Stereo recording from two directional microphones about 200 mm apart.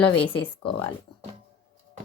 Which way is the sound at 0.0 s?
25° left (ahead or behind).